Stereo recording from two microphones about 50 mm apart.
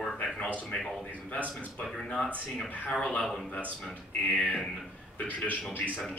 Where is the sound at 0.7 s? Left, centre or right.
Left.